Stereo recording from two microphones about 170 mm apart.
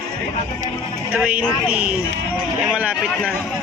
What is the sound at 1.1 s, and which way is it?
A woman's voice, 10° right (ahead or behind).